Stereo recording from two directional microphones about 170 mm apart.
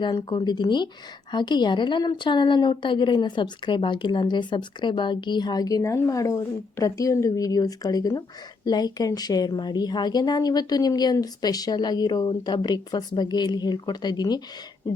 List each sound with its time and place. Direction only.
0.0 s a woman's voice: 30° left (ahead or behind)